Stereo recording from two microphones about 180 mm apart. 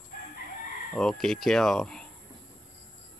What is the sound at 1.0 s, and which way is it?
Speech, centre (ahead or behind).